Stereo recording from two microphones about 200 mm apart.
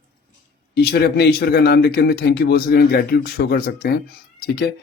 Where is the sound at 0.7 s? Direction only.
55° left (ahead or behind).